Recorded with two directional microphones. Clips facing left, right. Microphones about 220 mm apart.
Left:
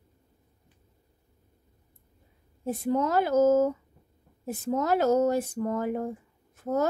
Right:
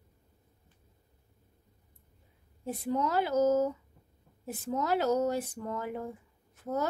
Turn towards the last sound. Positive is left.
turn(degrees=45)  # may be behind; listen again after turning